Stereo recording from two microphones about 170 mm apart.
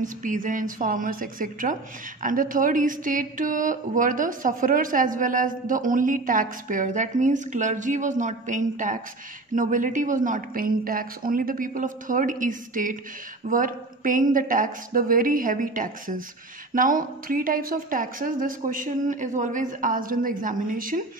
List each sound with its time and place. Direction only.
0.0 s speech: 50° right (ahead or behind)